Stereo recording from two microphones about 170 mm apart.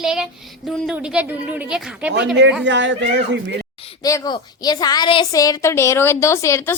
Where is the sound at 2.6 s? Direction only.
90° right.